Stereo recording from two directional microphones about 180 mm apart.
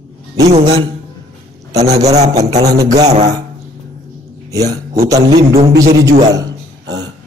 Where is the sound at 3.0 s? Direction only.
40° right (ahead or behind).